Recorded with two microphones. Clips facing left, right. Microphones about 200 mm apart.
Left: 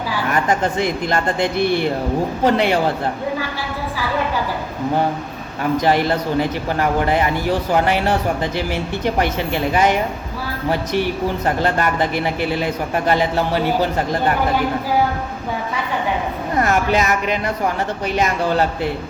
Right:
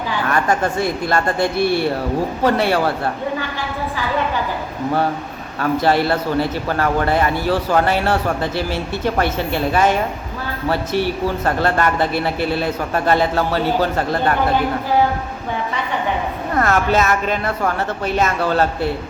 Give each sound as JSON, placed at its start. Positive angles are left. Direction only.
{"t": 0.3, "sound": "speech", "side_deg": 20}
{"t": 5.7, "sound": "speech", "side_deg": 15}
{"t": 16.6, "sound": "speech", "side_deg": 15}